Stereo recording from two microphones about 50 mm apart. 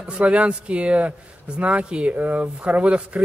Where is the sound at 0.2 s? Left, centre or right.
Right.